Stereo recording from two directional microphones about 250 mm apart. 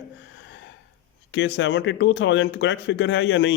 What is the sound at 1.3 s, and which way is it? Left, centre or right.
Speech, left.